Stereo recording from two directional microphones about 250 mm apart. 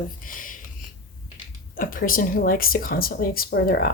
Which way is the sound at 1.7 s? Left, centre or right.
Left.